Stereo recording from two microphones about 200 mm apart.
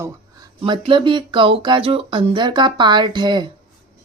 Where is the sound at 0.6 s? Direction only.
25° right (ahead or behind).